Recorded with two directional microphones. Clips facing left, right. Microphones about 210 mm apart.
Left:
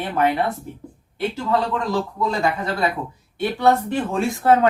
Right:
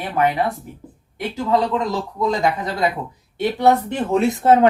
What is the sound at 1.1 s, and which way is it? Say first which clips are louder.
Speech: right 2 dB; 15° right (ahead or behind).